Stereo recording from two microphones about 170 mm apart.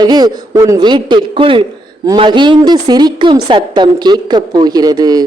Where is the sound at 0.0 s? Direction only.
25° right (ahead or behind).